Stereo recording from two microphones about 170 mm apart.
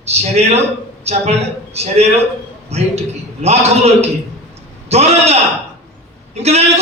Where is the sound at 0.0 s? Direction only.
40° right (ahead or behind).